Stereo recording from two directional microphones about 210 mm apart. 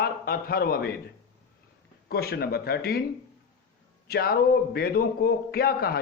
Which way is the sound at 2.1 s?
45° left (ahead or behind).